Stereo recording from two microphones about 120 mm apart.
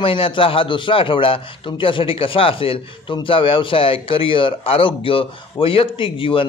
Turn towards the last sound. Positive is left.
turn(degrees=45)  # may be behind; listen again after turning